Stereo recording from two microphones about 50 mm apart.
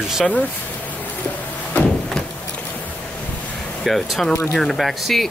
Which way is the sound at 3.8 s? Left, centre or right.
Centre.